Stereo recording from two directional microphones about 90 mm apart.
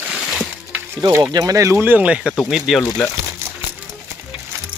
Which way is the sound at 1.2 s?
45° right (ahead or behind).